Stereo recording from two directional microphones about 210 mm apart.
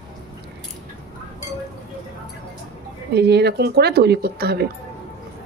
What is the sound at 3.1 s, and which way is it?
Speech, 50° right (ahead or behind).